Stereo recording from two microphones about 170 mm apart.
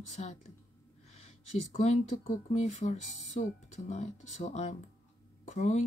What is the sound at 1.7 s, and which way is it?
Speech, 50° left (ahead or behind).